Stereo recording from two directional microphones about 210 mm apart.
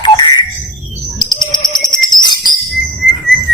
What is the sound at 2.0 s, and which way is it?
Jingle bell, 20° left (ahead or behind).